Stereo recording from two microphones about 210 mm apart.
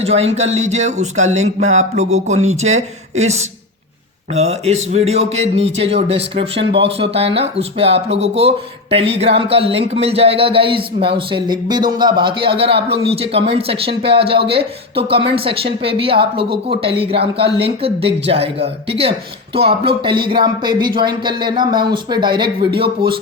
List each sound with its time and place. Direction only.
0.0 s speech: 30° right (ahead or behind)
4.4 s speech: 30° right (ahead or behind)